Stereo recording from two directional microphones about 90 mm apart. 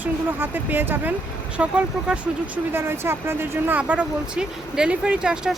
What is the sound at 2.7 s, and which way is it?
Speech, 25° right (ahead or behind).